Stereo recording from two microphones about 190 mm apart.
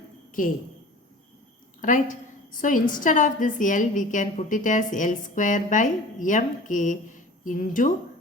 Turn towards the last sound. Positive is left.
turn(degrees=45)  # may be behind; listen again after turning